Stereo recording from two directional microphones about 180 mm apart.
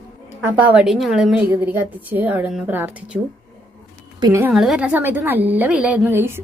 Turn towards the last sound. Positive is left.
turn(degrees=-10)  # may be behind; listen again after turning